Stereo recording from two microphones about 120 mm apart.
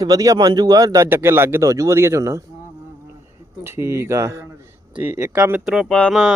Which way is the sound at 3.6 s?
20° right (ahead or behind).